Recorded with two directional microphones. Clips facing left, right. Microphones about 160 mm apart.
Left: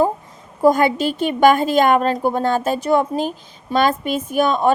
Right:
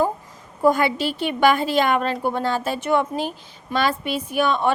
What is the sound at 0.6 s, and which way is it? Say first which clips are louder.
A woman's voice: left 4 dB; 45° left (ahead or behind).